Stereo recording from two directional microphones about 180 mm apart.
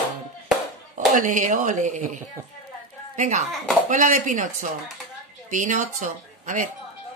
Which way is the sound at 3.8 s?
45° right (ahead or behind).